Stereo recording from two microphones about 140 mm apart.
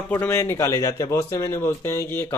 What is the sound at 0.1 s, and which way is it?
A man's voice, 20° left (ahead or behind).